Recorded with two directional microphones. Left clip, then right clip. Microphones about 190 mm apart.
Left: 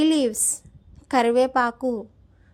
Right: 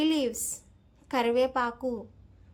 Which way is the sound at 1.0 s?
35° left (ahead or behind).